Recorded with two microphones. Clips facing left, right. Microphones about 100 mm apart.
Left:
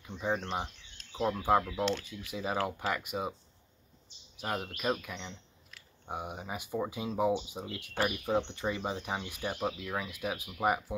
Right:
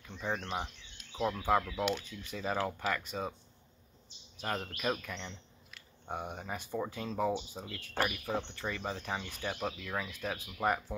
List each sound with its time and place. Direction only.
0.0 s speech: 15° left (ahead or behind)
4.4 s speech: 10° left (ahead or behind)